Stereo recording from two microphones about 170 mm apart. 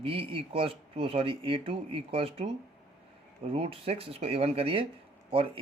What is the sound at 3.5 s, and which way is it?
Speech, 35° right (ahead or behind).